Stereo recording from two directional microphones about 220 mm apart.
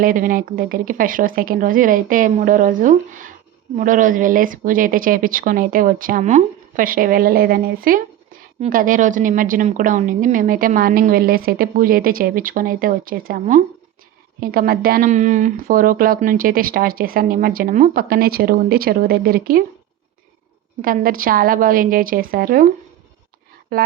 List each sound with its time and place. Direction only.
0.0 s a woman's voice: 40° right (ahead or behind)
20.8 s a woman's voice: 40° right (ahead or behind)
23.7 s a woman's voice: 40° right (ahead or behind)